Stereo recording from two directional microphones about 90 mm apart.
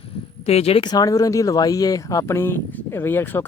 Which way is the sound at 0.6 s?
90° left.